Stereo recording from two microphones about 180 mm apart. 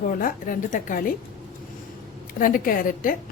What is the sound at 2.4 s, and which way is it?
Speech, 50° left (ahead or behind).